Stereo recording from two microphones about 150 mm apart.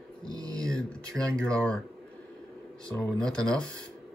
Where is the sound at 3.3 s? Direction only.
5° left (ahead or behind).